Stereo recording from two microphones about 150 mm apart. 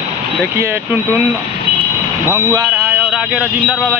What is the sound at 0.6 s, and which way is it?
Speech, 15° right (ahead or behind).